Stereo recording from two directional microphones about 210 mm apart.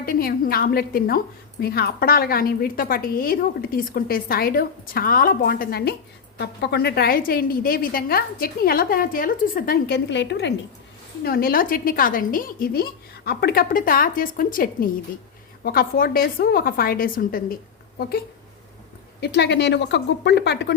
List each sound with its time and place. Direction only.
0.0 s a woman's voice: 45° left (ahead or behind)
11.2 s a woman's voice: 45° left (ahead or behind)
19.2 s a woman's voice: 55° left (ahead or behind)